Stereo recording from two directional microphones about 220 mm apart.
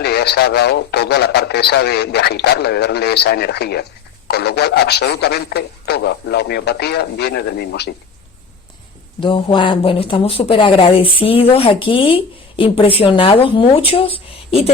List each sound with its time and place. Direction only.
0.0 s speech: 45° left (ahead or behind)
9.2 s speech: 20° left (ahead or behind)